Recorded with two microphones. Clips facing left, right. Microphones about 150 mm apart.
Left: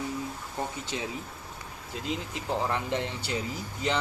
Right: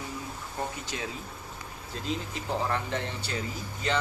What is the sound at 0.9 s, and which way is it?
Speech, 20° left (ahead or behind).